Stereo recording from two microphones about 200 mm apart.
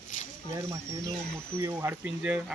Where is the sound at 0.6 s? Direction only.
15° right (ahead or behind).